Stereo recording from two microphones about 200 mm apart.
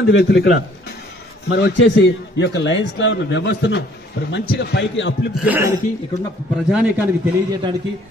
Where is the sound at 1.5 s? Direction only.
60° left (ahead or behind).